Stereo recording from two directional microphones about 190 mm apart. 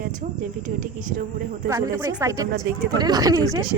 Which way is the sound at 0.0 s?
45° right (ahead or behind).